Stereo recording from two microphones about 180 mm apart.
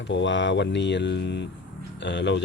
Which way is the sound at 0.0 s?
85° left.